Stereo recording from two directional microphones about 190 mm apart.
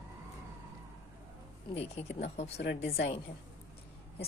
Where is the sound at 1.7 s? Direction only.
35° left (ahead or behind).